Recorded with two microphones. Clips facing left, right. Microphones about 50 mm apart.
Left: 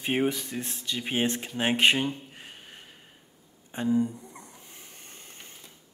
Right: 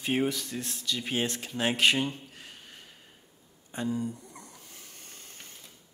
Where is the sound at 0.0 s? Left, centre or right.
Left.